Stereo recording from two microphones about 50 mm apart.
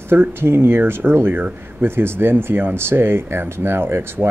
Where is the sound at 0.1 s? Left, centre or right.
Right.